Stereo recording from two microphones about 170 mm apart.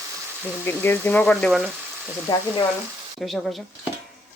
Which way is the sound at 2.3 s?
25° left (ahead or behind).